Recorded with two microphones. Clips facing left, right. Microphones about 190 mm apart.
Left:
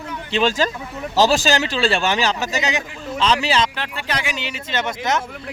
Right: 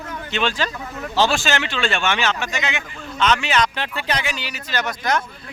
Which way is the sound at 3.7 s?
Centre (ahead or behind).